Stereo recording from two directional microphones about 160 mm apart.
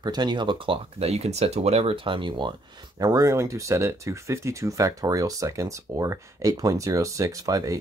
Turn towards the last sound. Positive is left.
turn(degrees=-20)  # may be behind; listen again after turning